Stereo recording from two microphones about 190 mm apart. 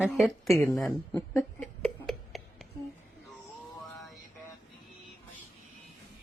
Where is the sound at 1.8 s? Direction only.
Centre (ahead or behind).